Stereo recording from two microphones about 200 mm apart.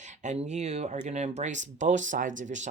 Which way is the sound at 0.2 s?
35° right (ahead or behind).